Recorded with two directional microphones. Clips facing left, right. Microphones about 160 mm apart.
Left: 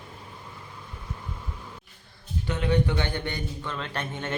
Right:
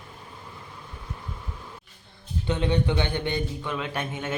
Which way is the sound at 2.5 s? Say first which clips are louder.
Right 1 dB; 20° right (ahead or behind).